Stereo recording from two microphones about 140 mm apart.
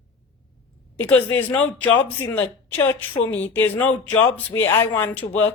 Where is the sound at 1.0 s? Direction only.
15° left (ahead or behind).